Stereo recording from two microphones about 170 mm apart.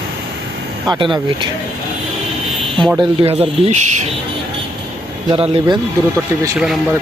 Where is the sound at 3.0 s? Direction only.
35° right (ahead or behind).